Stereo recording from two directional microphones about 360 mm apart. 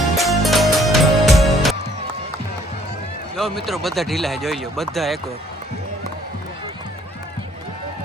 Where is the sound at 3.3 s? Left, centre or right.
Centre.